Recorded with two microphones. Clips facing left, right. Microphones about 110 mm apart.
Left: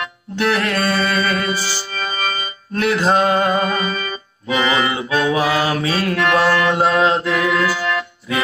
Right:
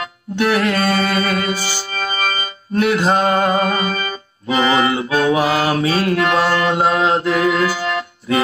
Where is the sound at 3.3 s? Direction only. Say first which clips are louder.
Right 1 dB; 45° right (ahead or behind).